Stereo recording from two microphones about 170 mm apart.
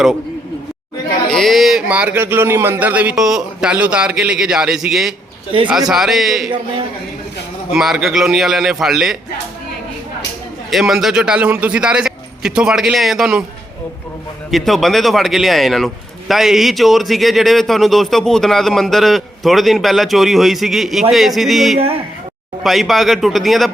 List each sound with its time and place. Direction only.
1.3 s speech: centre (ahead or behind)
5.5 s a man's voice: 30° right (ahead or behind)
5.9 s speech: centre (ahead or behind)
7.7 s speech: centre (ahead or behind)
10.7 s speech: centre (ahead or behind)
14.5 s speech: centre (ahead or behind)